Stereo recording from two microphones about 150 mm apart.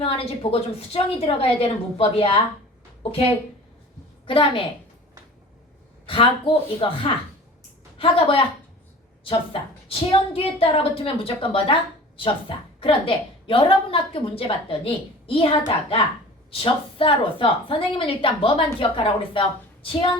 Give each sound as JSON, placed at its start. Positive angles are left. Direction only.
{"t": 0.0, "sound": "a woman's voice", "side_deg": 40}
{"t": 4.3, "sound": "a woman's voice", "side_deg": 35}
{"t": 6.1, "sound": "a woman's voice", "side_deg": 35}
{"t": 12.8, "sound": "a woman's voice", "side_deg": 35}